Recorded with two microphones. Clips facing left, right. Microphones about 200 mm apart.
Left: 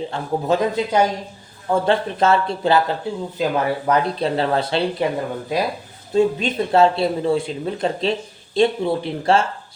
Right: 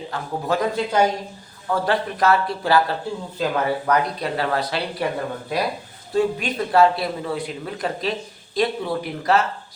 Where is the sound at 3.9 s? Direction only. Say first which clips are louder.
Left 3 dB; 25° left (ahead or behind).